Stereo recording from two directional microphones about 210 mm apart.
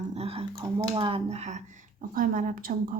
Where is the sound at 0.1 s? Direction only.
30° right (ahead or behind).